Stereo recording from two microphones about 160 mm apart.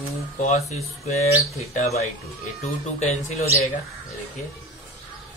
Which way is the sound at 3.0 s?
40° left (ahead or behind).